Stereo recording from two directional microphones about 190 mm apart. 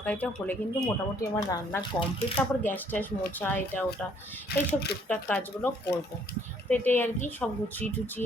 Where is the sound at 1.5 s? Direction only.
20° left (ahead or behind).